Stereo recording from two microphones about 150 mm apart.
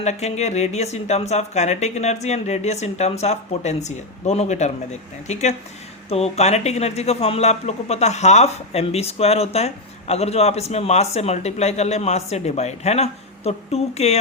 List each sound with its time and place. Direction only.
0.0 s speech: 45° left (ahead or behind)